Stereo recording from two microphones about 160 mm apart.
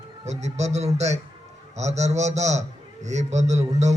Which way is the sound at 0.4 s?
45° right (ahead or behind).